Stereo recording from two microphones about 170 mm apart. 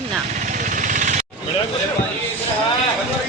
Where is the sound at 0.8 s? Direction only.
45° right (ahead or behind).